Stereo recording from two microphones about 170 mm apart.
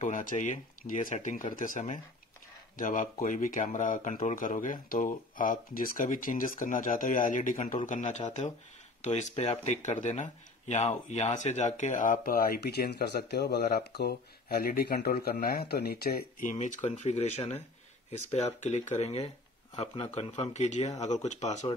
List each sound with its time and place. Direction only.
0.0 s speech: 50° left (ahead or behind)